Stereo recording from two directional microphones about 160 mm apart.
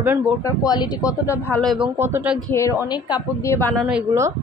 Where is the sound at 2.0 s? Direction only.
15° right (ahead or behind).